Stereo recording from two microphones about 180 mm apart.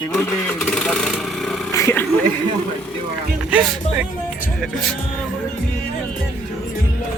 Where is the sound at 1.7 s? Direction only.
15° left (ahead or behind).